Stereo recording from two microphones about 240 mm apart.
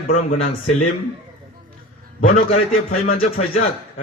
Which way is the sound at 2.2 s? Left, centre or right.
Left.